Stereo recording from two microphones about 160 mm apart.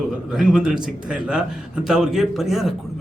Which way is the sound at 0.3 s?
5° right (ahead or behind).